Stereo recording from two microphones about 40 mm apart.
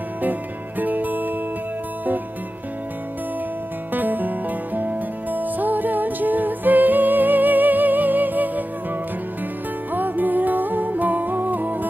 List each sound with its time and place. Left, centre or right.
0.2 s music: right
3.9 s music: right
9.9 s music: right